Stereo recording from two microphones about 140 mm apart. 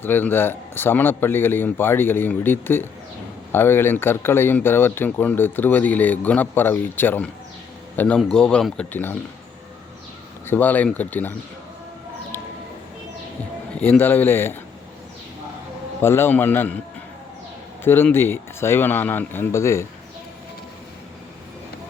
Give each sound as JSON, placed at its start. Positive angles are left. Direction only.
{"t": 0.0, "sound": "speech", "side_deg": 15}
{"t": 10.4, "sound": "speech", "side_deg": 15}
{"t": 13.8, "sound": "speech", "side_deg": 15}
{"t": 16.0, "sound": "speech", "side_deg": 15}
{"t": 17.8, "sound": "speech", "side_deg": 15}